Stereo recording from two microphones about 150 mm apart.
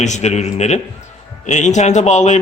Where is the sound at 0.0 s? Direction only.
50° left (ahead or behind).